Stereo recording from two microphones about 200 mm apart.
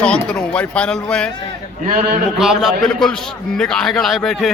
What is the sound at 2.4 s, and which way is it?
A man's voice, centre (ahead or behind).